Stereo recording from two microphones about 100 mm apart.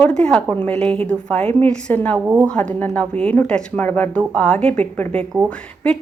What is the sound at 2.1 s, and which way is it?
Speech, 20° right (ahead or behind).